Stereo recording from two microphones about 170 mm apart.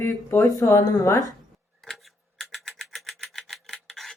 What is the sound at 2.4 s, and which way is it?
Filing, centre (ahead or behind).